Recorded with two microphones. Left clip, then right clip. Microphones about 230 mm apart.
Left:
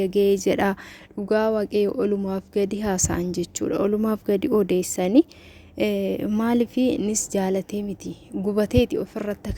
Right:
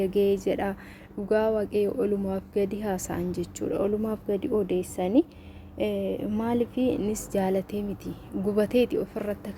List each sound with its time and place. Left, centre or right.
0.0 s speech: left